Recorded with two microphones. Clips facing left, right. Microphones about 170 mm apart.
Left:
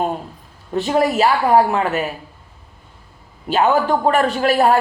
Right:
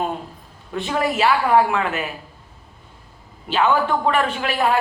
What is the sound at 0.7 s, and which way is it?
A woman's voice, 40° left (ahead or behind).